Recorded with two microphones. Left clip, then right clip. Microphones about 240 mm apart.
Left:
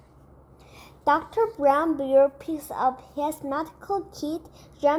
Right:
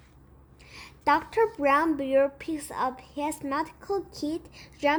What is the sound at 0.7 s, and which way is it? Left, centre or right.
A woman's voice, right.